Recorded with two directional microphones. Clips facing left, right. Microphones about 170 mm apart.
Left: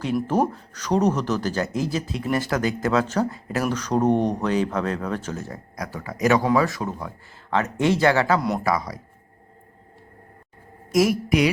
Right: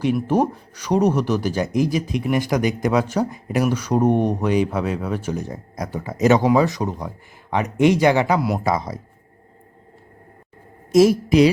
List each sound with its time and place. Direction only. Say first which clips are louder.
0.3 s speech: right 3 dB; 10° right (ahead or behind)
8.4 s speech: right 2 dB; 5° right (ahead or behind)
8.6 s a woman's voice: right 2 dB; 25° right (ahead or behind)
10.9 s a woman's voice: right 6 dB; 30° right (ahead or behind)